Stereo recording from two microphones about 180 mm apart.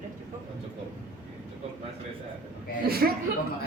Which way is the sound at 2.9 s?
60° right (ahead or behind).